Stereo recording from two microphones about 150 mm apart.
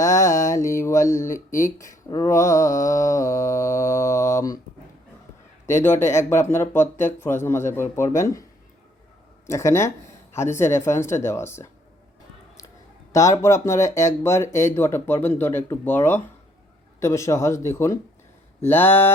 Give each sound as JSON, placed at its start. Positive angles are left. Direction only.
{"t": 0.0, "sound": "mantra", "side_deg": 20}
{"t": 5.6, "sound": "speech", "side_deg": 15}
{"t": 9.5, "sound": "speech", "side_deg": 20}
{"t": 13.1, "sound": "speech", "side_deg": 20}